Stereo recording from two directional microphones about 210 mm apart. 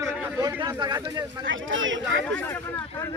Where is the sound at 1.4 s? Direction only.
65° right (ahead or behind).